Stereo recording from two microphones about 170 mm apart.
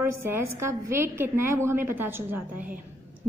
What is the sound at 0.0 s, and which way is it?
A woman's voice, 15° right (ahead or behind).